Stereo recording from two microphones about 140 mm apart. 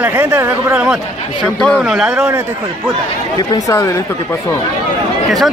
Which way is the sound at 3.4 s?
25° left (ahead or behind).